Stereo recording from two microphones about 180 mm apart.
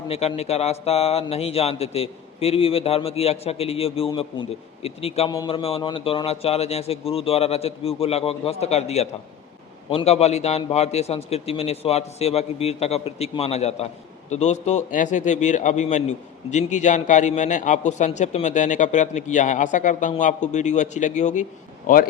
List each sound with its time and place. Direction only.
0.1 s a man's voice: 35° left (ahead or behind)
5.3 s a man's voice: 25° left (ahead or behind); by 22.0 s 50° left (ahead or behind)